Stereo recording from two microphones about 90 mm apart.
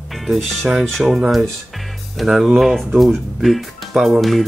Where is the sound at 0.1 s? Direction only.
Centre (ahead or behind).